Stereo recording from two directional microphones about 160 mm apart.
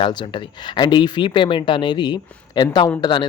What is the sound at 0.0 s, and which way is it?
Speech, 30° left (ahead or behind).